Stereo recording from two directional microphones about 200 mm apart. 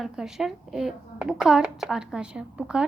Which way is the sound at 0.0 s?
Centre (ahead or behind).